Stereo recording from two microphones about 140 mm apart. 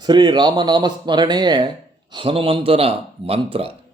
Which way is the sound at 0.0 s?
30° right (ahead or behind).